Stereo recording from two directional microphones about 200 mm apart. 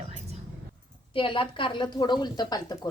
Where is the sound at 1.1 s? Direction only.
25° left (ahead or behind).